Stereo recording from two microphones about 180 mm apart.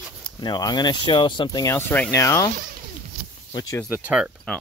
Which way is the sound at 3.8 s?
10° right (ahead or behind).